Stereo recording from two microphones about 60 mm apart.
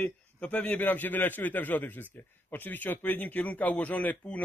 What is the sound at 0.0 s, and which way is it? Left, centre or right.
A man's voice, left.